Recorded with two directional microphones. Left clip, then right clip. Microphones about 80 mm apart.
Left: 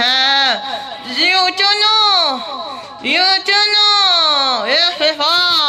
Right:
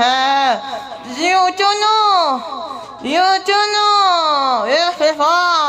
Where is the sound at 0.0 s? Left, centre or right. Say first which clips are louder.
Left 1 dB; right.